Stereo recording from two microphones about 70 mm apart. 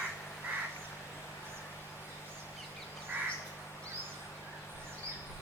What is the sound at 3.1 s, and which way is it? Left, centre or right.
Crow, right.